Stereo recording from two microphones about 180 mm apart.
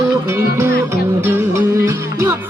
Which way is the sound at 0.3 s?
15° right (ahead or behind).